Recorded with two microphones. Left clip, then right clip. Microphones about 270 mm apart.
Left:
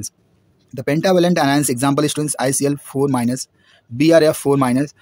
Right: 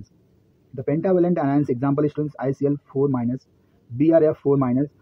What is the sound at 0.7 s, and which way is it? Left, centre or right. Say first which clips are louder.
Speech: left 5 dB; left.